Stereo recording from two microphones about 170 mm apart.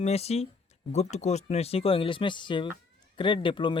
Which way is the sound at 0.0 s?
40° left (ahead or behind).